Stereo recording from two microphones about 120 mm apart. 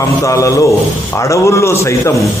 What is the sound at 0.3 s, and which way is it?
A man's voice, 25° left (ahead or behind).